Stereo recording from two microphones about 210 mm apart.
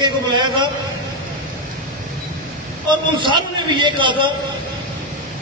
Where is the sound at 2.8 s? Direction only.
25° right (ahead or behind).